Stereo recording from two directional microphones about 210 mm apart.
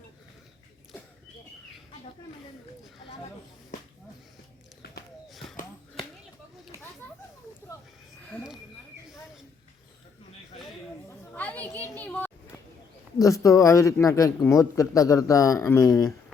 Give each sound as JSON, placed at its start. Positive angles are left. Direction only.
{"t": 8.3, "sound": "a sound", "side_deg": 0}
{"t": 11.3, "sound": "children playing", "side_deg": 5}
{"t": 13.1, "sound": "speech", "side_deg": 15}